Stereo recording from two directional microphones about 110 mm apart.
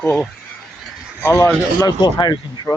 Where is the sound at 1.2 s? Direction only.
25° left (ahead or behind).